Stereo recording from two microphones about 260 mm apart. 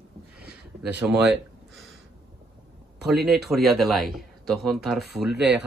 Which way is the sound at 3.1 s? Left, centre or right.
Centre.